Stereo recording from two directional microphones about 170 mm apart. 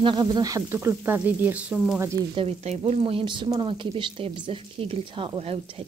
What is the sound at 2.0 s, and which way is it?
Frying, 15° right (ahead or behind).